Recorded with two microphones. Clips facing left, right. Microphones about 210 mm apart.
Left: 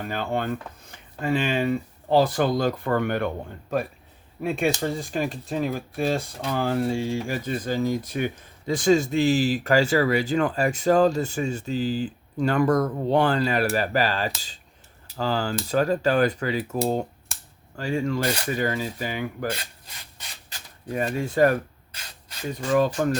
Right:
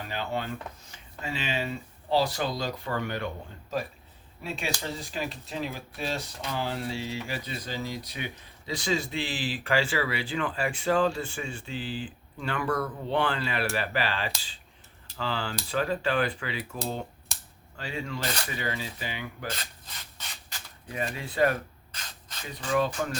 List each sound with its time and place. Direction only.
0.0 s speech: 50° left (ahead or behind)
19.5 s rub: 10° left (ahead or behind)
20.9 s speech: 45° left (ahead or behind)